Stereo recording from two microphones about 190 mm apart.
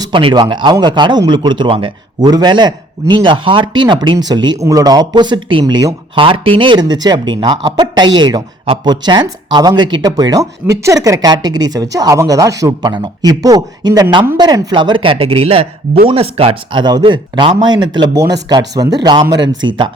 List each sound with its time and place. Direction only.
0.0 s speech: 25° right (ahead or behind)